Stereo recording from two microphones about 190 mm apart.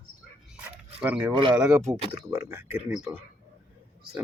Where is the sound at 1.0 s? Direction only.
10° right (ahead or behind).